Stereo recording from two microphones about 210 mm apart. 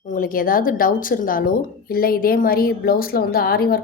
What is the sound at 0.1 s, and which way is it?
A woman's voice, 40° left (ahead or behind).